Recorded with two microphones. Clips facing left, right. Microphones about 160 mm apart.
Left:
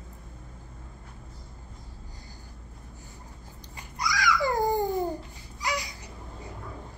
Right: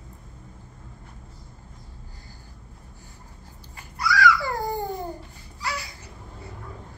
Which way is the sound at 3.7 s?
15° left (ahead or behind).